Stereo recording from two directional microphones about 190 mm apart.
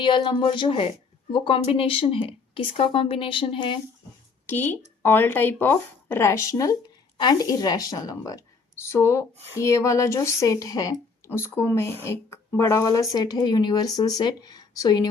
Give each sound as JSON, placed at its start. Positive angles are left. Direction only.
{"t": 0.0, "sound": "a woman's voice", "side_deg": 25}
{"t": 4.4, "sound": "a woman's voice", "side_deg": 10}